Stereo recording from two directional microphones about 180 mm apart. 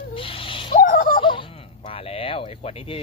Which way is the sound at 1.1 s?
25° left (ahead or behind).